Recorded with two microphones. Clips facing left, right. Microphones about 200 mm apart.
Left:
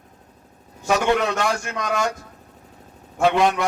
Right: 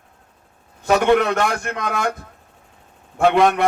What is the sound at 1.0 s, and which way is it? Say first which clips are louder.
Speech: right 5 dB; 60° right (ahead or behind).